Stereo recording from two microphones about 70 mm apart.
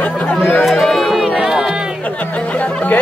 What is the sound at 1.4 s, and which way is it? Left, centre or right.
Music, centre.